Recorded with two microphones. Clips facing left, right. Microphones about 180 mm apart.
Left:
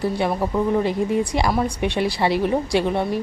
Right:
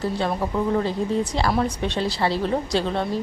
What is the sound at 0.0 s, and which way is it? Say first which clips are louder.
Speech: left 3 dB; 10° left (ahead or behind).